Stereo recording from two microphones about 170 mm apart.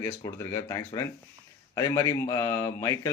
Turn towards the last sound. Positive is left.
turn(degrees=20)  # may be behind; listen again after turning